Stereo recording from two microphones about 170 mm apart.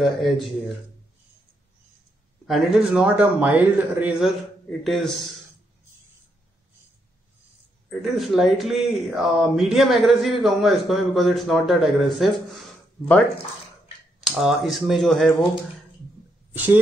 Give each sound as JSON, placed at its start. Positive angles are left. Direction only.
{"t": 0.0, "sound": "speech", "side_deg": 0}
{"t": 2.4, "sound": "speech", "side_deg": 0}
{"t": 4.6, "sound": "speech", "side_deg": 0}
{"t": 7.9, "sound": "speech", "side_deg": 0}
{"t": 14.2, "sound": "speech", "side_deg": 0}
{"t": 16.5, "sound": "a woman's voice", "side_deg": -10}